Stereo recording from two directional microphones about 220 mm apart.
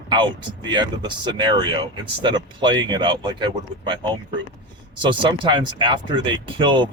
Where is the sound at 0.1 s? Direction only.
20° right (ahead or behind).